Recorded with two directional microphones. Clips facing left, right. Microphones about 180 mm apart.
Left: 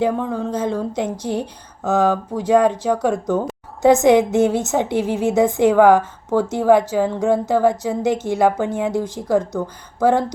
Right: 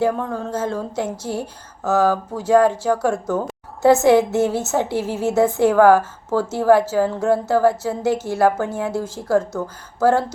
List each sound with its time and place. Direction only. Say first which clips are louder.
0.0 s a woman's voice: left 1 dB; 15° left (ahead or behind)